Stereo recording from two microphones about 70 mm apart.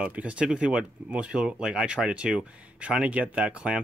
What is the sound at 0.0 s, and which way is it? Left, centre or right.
Speech, centre.